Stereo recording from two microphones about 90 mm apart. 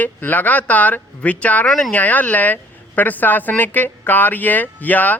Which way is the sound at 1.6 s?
5° left (ahead or behind).